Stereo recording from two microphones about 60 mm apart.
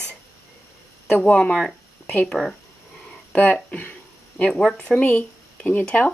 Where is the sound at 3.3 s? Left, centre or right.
Left.